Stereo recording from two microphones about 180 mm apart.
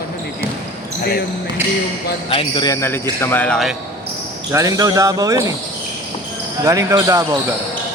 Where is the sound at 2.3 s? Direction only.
30° left (ahead or behind).